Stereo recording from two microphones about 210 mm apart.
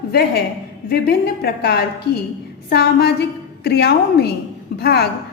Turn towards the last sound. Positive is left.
turn(degrees=50)  # may be behind; listen again after turning